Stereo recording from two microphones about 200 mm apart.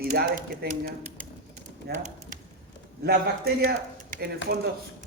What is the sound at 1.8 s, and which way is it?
Speech, 55° right (ahead or behind).